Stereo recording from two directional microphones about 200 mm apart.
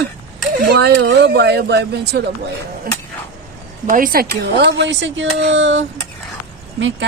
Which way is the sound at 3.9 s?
45° right (ahead or behind).